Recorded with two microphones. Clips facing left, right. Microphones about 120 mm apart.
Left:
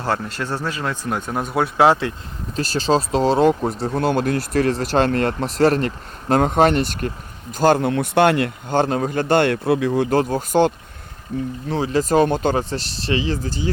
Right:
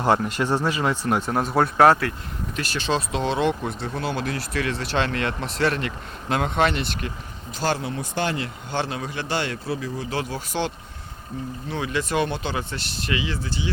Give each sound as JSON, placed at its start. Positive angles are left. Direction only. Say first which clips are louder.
{"t": 0.0, "sound": "speech", "louder": "right 3 dB", "side_deg": -15}
{"t": 2.0, "sound": "speech", "louder": "left 2 dB", "side_deg": 20}
{"t": 2.6, "sound": "speech", "louder": "left 7 dB", "side_deg": 35}
{"t": 8.7, "sound": "a man's voice", "louder": "left 9 dB", "side_deg": 45}
{"t": 10.2, "sound": "a man's voice", "louder": "left 8 dB", "side_deg": 45}
{"t": 11.7, "sound": "speech", "louder": "left 7 dB", "side_deg": 35}